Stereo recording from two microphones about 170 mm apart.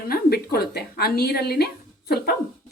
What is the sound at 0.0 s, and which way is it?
A woman's voice, 65° left (ahead or behind).